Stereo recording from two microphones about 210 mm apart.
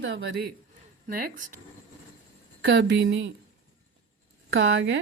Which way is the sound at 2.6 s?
55° right (ahead or behind).